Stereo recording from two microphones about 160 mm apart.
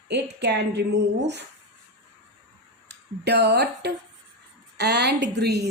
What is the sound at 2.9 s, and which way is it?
A woman's voice, 90° right.